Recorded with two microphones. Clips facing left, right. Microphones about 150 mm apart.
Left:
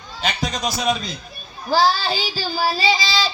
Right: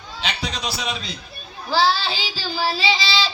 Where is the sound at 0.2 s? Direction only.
45° left (ahead or behind).